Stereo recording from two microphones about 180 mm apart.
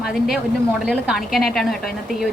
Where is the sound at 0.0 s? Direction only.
Centre (ahead or behind).